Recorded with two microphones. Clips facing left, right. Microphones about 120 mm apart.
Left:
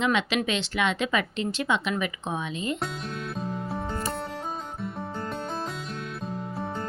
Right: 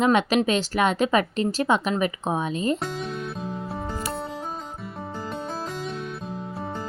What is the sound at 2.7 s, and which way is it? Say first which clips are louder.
Music: right 3 dB; centre (ahead or behind).